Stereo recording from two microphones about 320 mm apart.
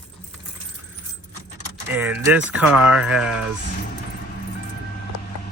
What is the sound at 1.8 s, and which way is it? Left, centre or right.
Speech, centre.